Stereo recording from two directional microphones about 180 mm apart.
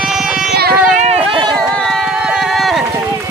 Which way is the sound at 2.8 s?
15° right (ahead or behind).